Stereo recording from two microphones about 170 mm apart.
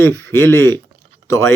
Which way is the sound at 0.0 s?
15° left (ahead or behind).